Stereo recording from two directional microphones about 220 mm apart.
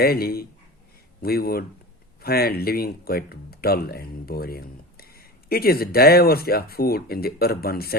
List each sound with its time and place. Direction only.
0.0 s speech: 45° left (ahead or behind)